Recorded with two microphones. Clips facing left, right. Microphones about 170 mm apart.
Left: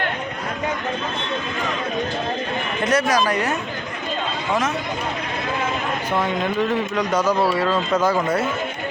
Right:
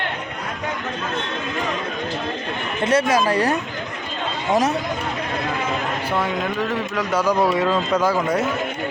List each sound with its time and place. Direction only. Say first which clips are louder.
2.8 s speech: right 2 dB; 25° right (ahead or behind)
6.2 s speech: left 2 dB; 5° right (ahead or behind)